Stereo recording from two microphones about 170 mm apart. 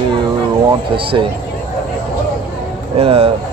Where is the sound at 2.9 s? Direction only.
35° right (ahead or behind).